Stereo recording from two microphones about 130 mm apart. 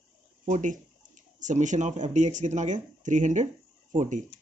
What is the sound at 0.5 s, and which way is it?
Speech, 75° right (ahead or behind).